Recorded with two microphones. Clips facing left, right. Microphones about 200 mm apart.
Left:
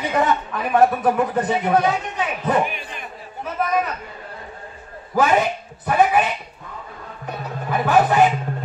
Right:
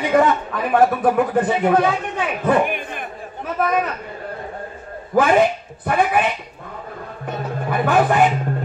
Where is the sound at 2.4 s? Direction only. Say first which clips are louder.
Right 4 dB; 55° right (ahead or behind).